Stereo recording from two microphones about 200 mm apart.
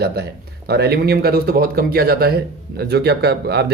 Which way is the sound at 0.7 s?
55° right (ahead or behind).